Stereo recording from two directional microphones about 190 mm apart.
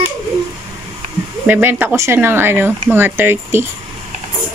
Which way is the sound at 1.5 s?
10° right (ahead or behind).